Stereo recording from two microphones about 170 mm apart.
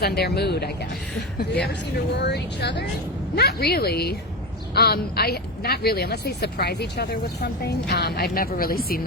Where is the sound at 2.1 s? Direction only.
85° left.